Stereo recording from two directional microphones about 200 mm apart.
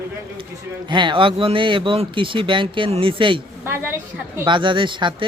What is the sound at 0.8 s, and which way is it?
Speech, 25° right (ahead or behind).